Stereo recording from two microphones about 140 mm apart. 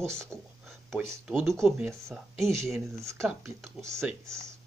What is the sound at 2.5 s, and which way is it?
Speech, centre (ahead or behind).